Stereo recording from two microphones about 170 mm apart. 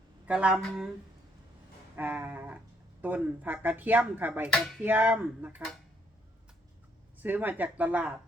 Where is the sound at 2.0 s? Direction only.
10° right (ahead or behind).